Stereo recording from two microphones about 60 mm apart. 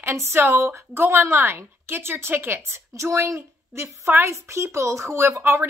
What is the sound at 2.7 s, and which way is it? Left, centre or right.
A woman's voice, right.